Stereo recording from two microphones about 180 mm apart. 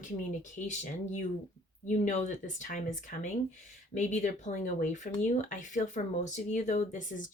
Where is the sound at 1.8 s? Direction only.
40° left (ahead or behind).